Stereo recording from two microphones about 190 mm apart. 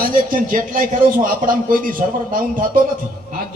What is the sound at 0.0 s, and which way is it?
A man's voice, 45° right (ahead or behind).